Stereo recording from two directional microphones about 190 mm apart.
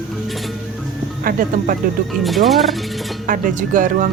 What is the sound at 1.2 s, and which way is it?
Speech, 50° right (ahead or behind).